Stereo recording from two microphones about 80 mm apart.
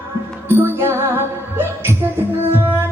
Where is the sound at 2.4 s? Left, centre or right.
Right.